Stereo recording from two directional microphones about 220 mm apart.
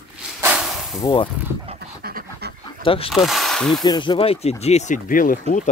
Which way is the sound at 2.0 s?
45° right (ahead or behind).